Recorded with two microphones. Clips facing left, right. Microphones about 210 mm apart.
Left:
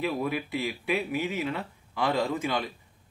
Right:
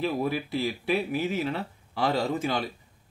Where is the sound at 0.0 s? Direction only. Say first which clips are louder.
Right 2 dB; 35° right (ahead or behind).